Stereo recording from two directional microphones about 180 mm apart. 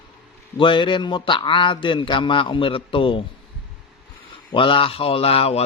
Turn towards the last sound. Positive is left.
turn(degrees=35)  # may be behind; listen again after turning